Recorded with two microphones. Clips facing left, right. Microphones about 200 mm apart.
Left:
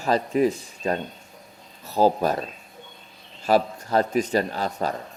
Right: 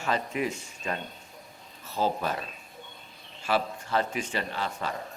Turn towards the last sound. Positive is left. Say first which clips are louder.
# left 7 dB
turn(degrees=40)  # may be behind; listen again after turning